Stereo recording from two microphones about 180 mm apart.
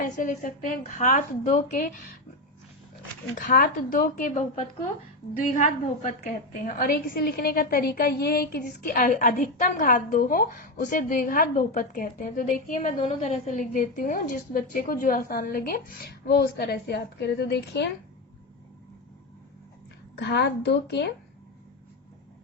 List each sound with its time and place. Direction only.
0.0 s a woman's voice: 45° left (ahead or behind)
3.3 s a woman's voice: 50° left (ahead or behind); by 17.8 s 70° left (ahead or behind)
20.1 s a woman's voice: 70° left (ahead or behind)